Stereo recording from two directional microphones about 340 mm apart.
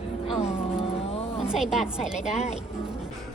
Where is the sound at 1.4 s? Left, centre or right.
Centre.